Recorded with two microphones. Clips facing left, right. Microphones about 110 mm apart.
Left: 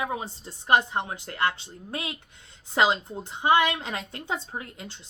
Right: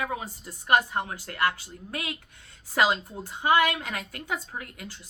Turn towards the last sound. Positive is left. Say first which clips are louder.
# left 2 dB
turn(degrees=25)  # may be behind; listen again after turning